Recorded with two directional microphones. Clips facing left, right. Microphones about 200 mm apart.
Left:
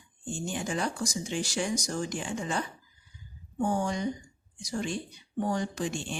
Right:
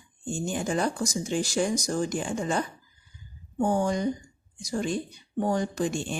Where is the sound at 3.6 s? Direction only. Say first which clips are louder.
Right 4 dB; 35° right (ahead or behind).